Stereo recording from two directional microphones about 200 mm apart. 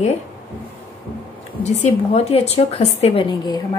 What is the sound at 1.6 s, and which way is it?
A woman's voice, 35° left (ahead or behind).